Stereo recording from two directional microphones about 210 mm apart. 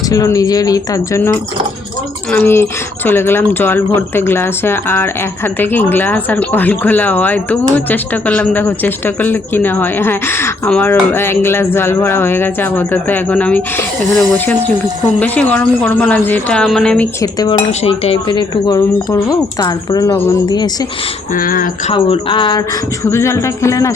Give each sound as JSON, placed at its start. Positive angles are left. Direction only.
{"t": 0.1, "sound": "speech", "side_deg": 15}
{"t": 17.7, "sound": "speech", "side_deg": 25}
{"t": 21.3, "sound": "speech", "side_deg": 40}
{"t": 21.9, "sound": "speech", "side_deg": 25}